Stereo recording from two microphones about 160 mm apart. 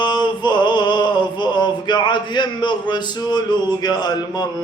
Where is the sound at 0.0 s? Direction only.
25° left (ahead or behind).